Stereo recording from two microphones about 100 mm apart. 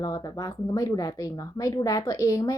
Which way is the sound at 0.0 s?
40° left (ahead or behind).